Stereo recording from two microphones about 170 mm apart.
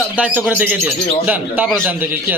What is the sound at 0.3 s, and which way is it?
Speech, 10° right (ahead or behind).